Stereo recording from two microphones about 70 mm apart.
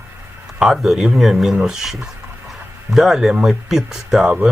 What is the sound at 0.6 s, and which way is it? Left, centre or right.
Speech, centre.